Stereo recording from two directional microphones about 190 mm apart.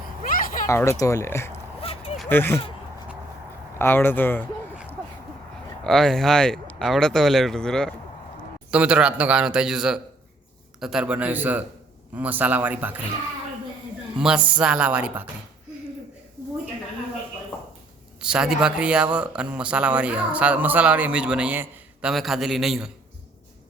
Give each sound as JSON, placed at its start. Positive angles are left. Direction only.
{"t": 0.2, "sound": "a sound", "side_deg": 45}
{"t": 0.7, "sound": "speech", "side_deg": 15}
{"t": 1.8, "sound": "a sound", "side_deg": 30}
{"t": 2.3, "sound": "speech", "side_deg": 10}
{"t": 3.8, "sound": "speech", "side_deg": 10}
{"t": 5.8, "sound": "speech", "side_deg": 0}
{"t": 14.2, "sound": "speech", "side_deg": -5}
{"t": 18.2, "sound": "speech", "side_deg": -5}